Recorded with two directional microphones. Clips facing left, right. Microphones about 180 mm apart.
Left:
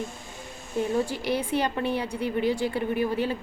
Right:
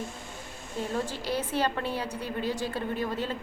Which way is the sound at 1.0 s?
15° left (ahead or behind).